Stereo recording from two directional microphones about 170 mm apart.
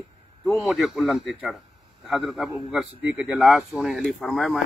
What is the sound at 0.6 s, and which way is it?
A man's voice, centre (ahead or behind).